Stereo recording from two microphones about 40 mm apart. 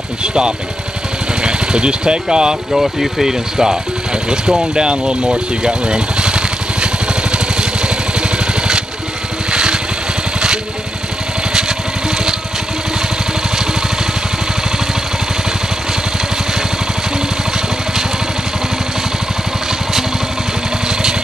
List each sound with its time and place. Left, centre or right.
0.2 s speech: right
2.7 s speech: centre
4.3 s vehicle: centre